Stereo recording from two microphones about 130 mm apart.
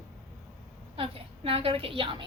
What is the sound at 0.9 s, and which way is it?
A woman's voice, 45° right (ahead or behind).